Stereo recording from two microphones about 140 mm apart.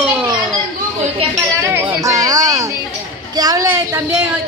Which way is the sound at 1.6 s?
20° right (ahead or behind).